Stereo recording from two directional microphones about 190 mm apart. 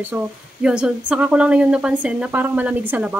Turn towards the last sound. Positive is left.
turn(degrees=-5)  # may be behind; listen again after turning